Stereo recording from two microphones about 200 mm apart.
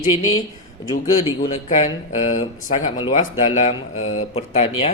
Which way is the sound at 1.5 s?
35° left (ahead or behind).